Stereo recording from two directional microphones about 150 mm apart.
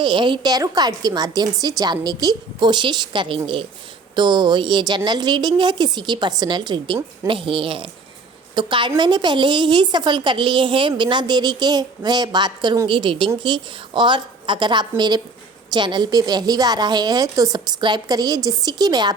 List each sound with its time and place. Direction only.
0.0 s a woman's voice: 30° right (ahead or behind)